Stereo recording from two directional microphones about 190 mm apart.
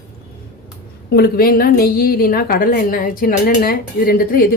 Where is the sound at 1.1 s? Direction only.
55° left (ahead or behind).